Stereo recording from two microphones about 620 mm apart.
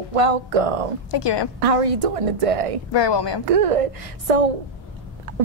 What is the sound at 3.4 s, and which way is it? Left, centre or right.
A woman's voice, right.